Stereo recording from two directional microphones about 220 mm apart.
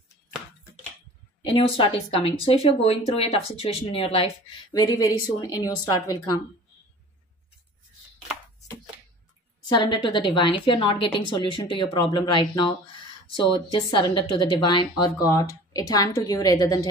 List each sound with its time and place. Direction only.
1.4 s speech: 25° left (ahead or behind)
9.7 s speech: 20° left (ahead or behind)